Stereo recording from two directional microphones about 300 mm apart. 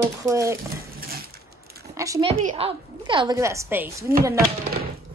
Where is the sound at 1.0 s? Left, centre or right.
Right.